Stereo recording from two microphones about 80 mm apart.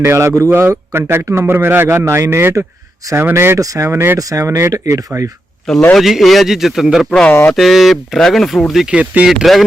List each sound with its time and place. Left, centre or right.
0.0 s a man's voice: right
4.2 s speech: right
5.7 s speech: centre
7.3 s a sound: left
7.5 s speech: centre
9.0 s speech: centre
9.3 s speech: centre